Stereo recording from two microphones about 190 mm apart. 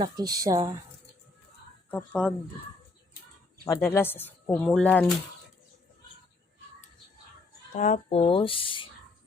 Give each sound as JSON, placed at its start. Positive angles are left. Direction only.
{"t": 0.0, "sound": "a woman's voice", "side_deg": -20}
{"t": 1.9, "sound": "speech", "side_deg": 5}
{"t": 3.7, "sound": "speech", "side_deg": 10}
{"t": 7.7, "sound": "speech", "side_deg": 40}
{"t": 7.9, "sound": "speech", "side_deg": 30}